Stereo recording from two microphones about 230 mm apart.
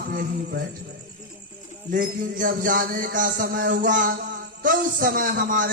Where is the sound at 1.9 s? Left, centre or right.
Right.